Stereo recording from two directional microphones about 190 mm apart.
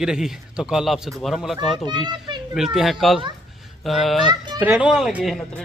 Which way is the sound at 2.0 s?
25° right (ahead or behind).